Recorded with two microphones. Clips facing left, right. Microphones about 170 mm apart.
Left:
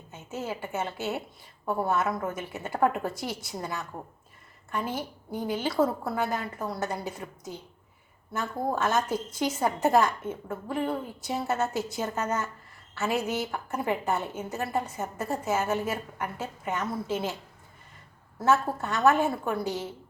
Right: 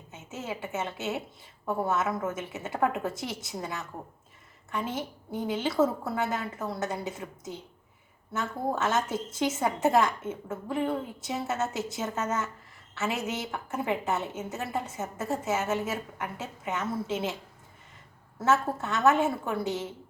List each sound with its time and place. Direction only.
0.1 s a woman's voice: 20° right (ahead or behind)
18.3 s a woman's voice: 20° right (ahead or behind)